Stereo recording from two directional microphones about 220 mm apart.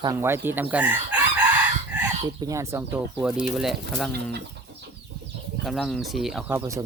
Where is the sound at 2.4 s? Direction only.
15° right (ahead or behind).